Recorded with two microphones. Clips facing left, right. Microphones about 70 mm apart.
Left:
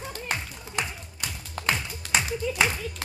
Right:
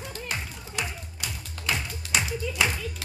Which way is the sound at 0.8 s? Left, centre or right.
Left.